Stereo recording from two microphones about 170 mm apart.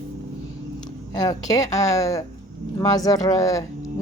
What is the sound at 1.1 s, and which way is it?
Speech, 20° left (ahead or behind).